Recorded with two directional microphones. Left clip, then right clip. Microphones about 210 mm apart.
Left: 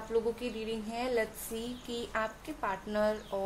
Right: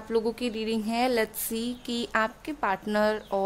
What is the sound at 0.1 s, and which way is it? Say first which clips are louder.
Speech: right 5 dB; 55° right (ahead or behind).